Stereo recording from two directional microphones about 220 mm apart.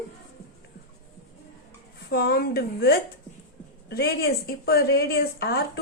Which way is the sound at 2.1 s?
45° left (ahead or behind).